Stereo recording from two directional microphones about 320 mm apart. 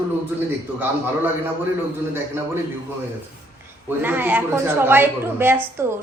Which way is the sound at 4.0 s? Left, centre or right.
Centre.